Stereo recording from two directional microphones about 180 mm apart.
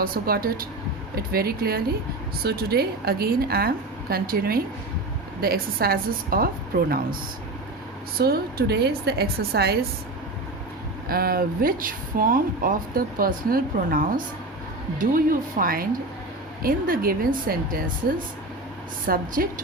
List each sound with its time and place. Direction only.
0.0 s a woman's voice: 55° right (ahead or behind)
8.2 s a woman's voice: 60° right (ahead or behind)
11.1 s speech: 55° right (ahead or behind)
19.0 s speech: 55° right (ahead or behind)